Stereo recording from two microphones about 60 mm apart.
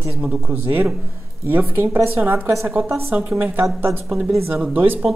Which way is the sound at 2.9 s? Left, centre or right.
Right.